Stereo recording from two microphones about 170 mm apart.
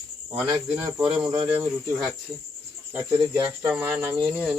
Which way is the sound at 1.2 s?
30° right (ahead or behind).